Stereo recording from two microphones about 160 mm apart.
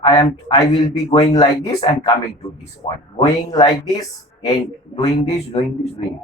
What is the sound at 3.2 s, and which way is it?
Speech, 25° left (ahead or behind).